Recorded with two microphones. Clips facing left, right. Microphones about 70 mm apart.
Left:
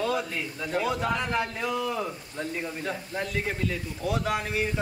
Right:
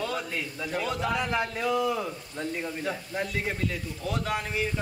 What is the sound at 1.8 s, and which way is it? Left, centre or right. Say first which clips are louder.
Speech: right 2 dB; centre.